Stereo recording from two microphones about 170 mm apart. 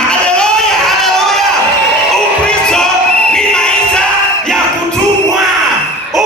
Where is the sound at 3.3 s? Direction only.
5° left (ahead or behind).